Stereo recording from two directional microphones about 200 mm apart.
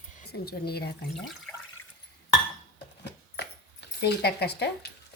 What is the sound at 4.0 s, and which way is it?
Speech, 55° left (ahead or behind).